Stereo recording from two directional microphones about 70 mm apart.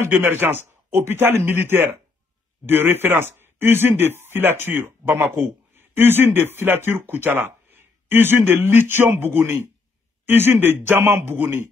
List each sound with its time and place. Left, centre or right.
0.0 s a man's voice: right